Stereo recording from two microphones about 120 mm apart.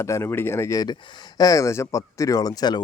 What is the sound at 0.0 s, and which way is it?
Speech, 25° left (ahead or behind).